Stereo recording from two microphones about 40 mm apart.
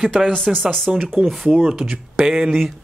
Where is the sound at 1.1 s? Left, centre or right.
Centre.